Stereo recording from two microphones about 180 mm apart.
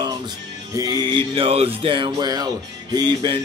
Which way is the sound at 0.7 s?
20° right (ahead or behind).